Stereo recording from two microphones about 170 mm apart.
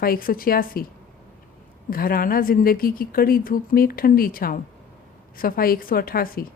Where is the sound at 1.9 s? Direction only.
60° left (ahead or behind).